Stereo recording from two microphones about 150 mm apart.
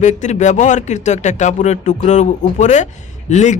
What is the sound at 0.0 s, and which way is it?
Speech, 50° left (ahead or behind).